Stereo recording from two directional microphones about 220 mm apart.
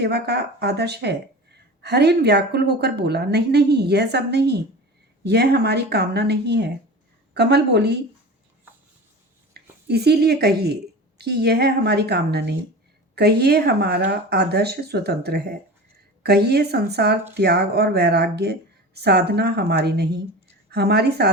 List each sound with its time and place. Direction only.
0.0 s speech: 45° right (ahead or behind)
9.5 s speech: 45° right (ahead or behind)